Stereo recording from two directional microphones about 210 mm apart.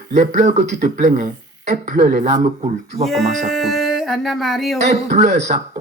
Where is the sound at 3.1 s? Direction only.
Centre (ahead or behind).